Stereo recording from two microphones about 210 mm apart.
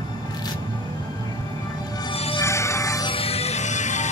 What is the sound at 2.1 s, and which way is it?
Music, 25° left (ahead or behind).